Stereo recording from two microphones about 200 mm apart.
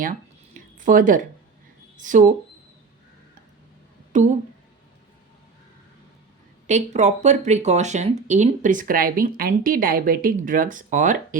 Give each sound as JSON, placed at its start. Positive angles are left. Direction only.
{"t": 0.9, "sound": "speech", "side_deg": -40}
{"t": 4.1, "sound": "speech", "side_deg": -35}
{"t": 6.7, "sound": "speech", "side_deg": -35}